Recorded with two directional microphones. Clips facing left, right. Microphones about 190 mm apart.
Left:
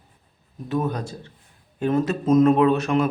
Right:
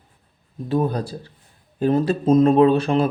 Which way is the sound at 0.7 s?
35° right (ahead or behind).